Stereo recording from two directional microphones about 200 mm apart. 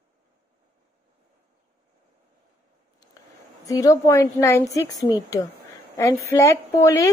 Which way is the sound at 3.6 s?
15° left (ahead or behind).